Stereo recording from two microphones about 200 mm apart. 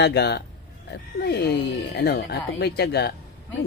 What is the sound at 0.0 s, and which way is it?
Speech, 55° left (ahead or behind).